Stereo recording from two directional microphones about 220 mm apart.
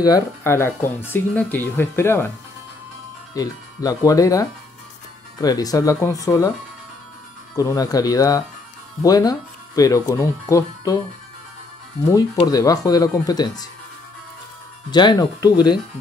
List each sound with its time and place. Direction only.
0.0 s speech: 15° left (ahead or behind)
3.3 s speech: 15° left (ahead or behind)
7.5 s speech: 15° left (ahead or behind)
12.0 s speech: 15° left (ahead or behind)
14.9 s speech: 20° left (ahead or behind)